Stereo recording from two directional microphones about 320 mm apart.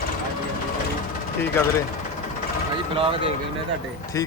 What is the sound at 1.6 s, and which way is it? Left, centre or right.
Speech, centre.